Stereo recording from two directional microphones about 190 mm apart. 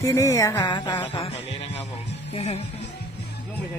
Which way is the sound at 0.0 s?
15° left (ahead or behind).